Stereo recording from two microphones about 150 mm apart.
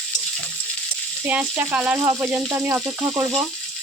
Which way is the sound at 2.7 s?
15° right (ahead or behind).